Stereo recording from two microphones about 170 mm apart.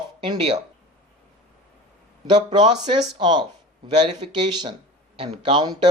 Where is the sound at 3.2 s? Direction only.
25° right (ahead or behind).